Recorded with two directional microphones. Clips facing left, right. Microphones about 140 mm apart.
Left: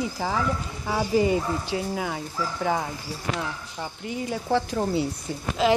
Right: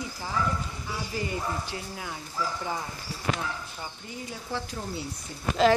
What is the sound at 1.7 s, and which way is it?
Speech, 90° left.